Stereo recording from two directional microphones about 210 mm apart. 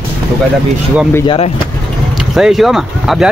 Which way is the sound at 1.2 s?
25° left (ahead or behind).